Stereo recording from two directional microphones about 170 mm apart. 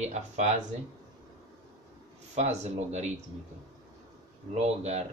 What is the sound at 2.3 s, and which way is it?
Speech, 40° right (ahead or behind).